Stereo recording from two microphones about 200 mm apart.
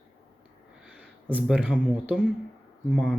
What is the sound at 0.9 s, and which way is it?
Speech, 5° right (ahead or behind).